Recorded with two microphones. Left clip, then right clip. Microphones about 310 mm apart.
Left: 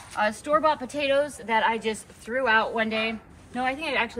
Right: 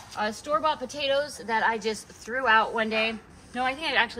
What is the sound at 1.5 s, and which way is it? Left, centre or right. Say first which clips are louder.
Speech: left 1 dB; centre.